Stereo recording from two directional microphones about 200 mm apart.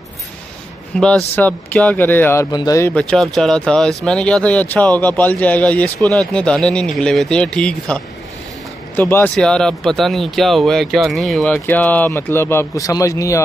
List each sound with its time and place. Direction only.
0.9 s speech: 5° left (ahead or behind)
2.9 s speech: 5° left (ahead or behind)